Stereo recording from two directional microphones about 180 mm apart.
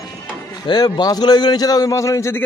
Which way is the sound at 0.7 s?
20° left (ahead or behind).